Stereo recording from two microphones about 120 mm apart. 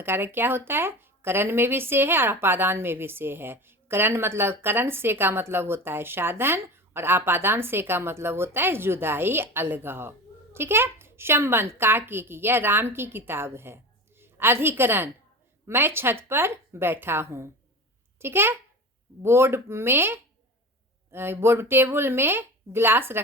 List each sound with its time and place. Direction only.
0.0 s a woman's voice: 20° right (ahead or behind)